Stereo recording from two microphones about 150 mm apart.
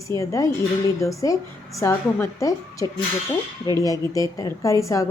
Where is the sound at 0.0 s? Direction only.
20° left (ahead or behind).